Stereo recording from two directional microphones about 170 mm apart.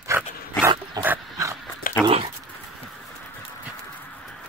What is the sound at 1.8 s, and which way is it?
Dog, 55° left (ahead or behind).